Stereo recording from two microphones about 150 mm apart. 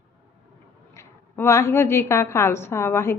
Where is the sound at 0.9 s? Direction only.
20° left (ahead or behind).